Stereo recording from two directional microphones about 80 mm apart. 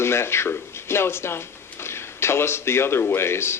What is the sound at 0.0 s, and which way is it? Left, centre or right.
Speech, left.